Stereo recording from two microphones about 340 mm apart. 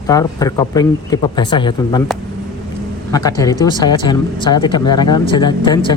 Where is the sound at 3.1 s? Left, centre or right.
Centre.